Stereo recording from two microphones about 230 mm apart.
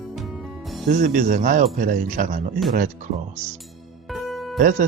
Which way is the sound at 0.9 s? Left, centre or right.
Right.